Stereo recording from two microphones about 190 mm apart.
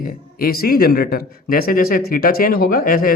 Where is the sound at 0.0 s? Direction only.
50° left (ahead or behind).